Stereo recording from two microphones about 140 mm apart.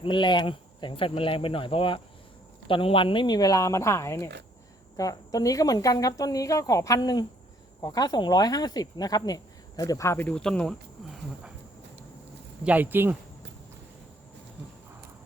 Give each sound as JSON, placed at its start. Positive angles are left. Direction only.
{"t": 0.0, "sound": "speech", "side_deg": 35}
{"t": 12.6, "sound": "speech", "side_deg": -10}